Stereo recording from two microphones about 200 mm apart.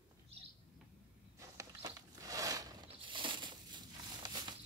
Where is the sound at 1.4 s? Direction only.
15° right (ahead or behind).